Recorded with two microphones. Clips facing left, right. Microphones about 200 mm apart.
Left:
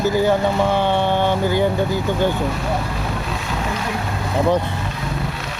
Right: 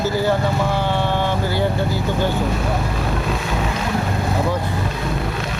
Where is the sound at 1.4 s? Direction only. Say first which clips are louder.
Left 3 dB; 20° left (ahead or behind).